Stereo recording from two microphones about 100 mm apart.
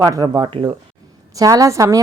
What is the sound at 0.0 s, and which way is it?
A woman's voice, 40° right (ahead or behind).